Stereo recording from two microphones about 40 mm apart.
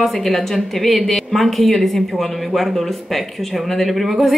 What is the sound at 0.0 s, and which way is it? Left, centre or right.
A woman's voice, centre.